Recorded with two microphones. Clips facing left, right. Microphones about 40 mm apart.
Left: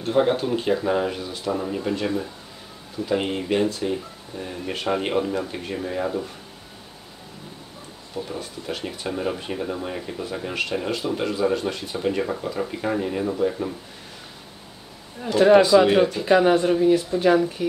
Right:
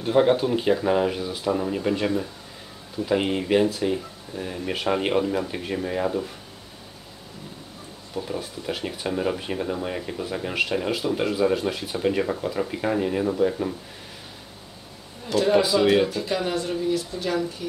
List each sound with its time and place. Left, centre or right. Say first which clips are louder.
0.0 s speech: right 1 dB; centre
8.1 s speech: right 1 dB; centre
15.3 s speech: left 5 dB; left
15.8 s speech: left 2 dB; centre
16.3 s speech: left 9 dB; left